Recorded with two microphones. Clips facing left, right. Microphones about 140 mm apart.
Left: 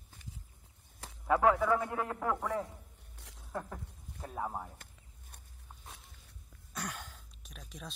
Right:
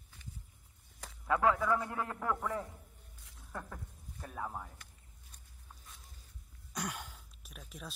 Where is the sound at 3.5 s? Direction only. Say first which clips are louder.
Left 4 dB; 20° left (ahead or behind).